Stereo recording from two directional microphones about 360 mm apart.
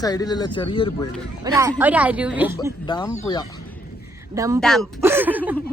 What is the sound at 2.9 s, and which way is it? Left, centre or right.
Speech, centre.